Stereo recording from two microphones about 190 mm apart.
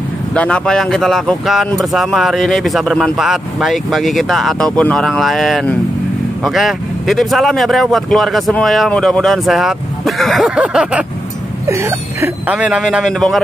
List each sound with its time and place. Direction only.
0.3 s speech: 5° left (ahead or behind)